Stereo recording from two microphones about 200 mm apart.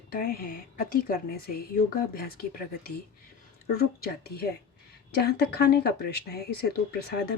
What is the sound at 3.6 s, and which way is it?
Speech, 50° left (ahead or behind).